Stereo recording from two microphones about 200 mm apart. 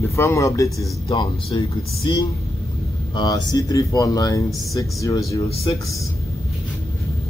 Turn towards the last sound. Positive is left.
turn(degrees=25)  # may be behind; listen again after turning